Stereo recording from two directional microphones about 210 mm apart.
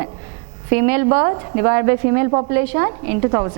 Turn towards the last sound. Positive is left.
turn(degrees=-20)  # may be behind; listen again after turning